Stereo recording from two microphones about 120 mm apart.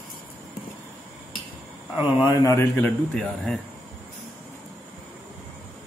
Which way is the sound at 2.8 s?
10° left (ahead or behind).